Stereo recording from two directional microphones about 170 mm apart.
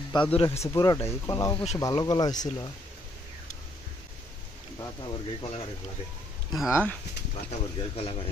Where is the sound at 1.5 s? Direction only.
40° left (ahead or behind).